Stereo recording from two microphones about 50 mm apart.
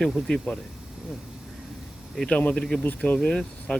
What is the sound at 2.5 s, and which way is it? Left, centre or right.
Speech, centre.